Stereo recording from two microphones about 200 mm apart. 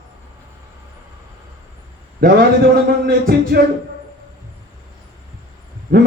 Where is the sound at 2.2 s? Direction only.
50° right (ahead or behind).